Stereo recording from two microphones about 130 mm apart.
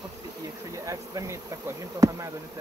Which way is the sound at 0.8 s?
25° right (ahead or behind).